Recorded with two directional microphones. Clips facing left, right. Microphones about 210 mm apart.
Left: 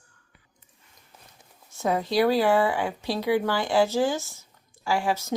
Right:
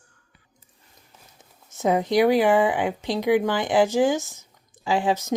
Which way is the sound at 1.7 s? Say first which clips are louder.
Right 4 dB; 20° right (ahead or behind).